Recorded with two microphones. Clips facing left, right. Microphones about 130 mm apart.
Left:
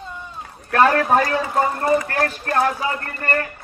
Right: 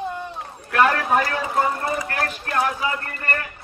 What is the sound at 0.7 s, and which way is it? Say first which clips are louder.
Speech: left 3 dB; 35° left (ahead or behind).